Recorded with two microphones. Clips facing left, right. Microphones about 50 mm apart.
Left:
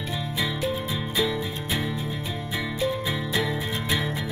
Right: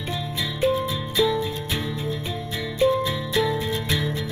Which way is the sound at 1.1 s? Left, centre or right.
Centre.